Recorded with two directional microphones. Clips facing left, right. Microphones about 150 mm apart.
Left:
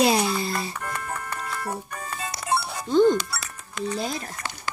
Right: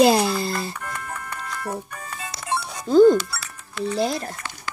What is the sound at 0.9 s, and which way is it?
Music, 25° left (ahead or behind).